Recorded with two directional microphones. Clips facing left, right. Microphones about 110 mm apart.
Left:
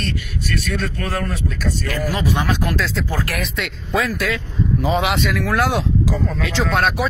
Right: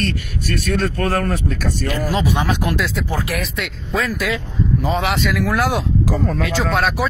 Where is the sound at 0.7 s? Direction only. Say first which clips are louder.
Right 5 dB; 45° right (ahead or behind).